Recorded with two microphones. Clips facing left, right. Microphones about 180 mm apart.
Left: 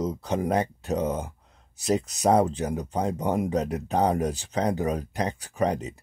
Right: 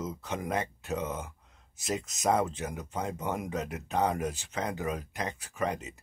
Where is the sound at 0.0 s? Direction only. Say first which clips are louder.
Left 8 dB; 35° left (ahead or behind).